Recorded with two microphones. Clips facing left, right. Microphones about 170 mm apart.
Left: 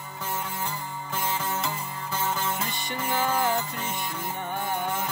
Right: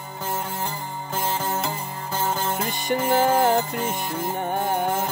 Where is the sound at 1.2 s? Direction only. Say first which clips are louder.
Right 4 dB; 40° right (ahead or behind).